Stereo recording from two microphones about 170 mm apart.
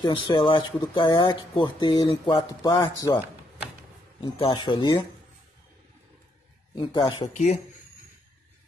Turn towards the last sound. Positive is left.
turn(degrees=25)  # may be behind; listen again after turning